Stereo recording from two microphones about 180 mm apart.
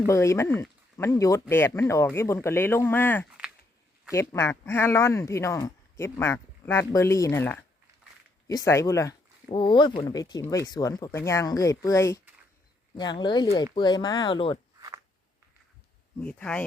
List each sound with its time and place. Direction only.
0.0 s speech: 15° left (ahead or behind)
14.8 s a sound: 20° right (ahead or behind)
16.2 s speech: 5° left (ahead or behind)